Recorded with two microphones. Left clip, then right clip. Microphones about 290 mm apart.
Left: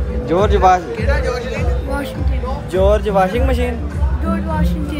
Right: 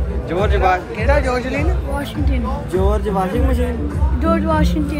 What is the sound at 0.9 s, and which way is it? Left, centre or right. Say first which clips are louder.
Speech: right 2 dB; right.